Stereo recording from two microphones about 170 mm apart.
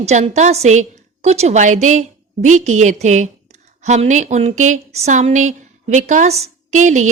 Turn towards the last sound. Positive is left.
turn(degrees=-45)  # may be behind; listen again after turning